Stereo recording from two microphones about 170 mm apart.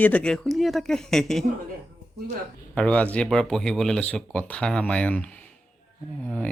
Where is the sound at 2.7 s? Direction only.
5° left (ahead or behind).